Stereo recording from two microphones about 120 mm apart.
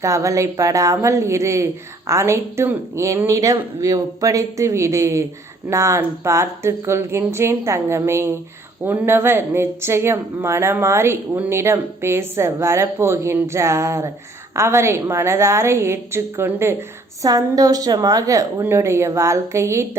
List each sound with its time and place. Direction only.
0.0 s a woman's voice: 25° right (ahead or behind)